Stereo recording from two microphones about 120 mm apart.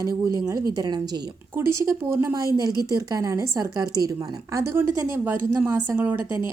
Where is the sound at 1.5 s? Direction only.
20° right (ahead or behind).